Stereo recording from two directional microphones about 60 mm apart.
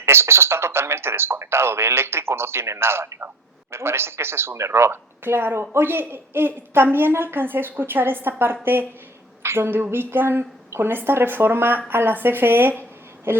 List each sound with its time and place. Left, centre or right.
0.0 s a man's voice: right